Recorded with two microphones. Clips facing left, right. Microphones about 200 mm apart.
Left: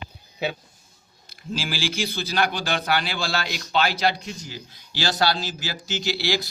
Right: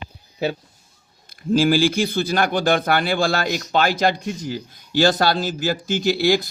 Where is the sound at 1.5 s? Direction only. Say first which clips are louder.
Right 12 dB; 50° right (ahead or behind).